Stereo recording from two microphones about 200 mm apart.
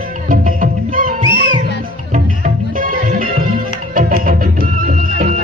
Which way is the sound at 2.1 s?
40° right (ahead or behind).